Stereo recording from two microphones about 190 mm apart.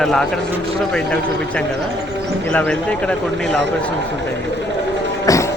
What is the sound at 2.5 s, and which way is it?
Speech, 5° left (ahead or behind).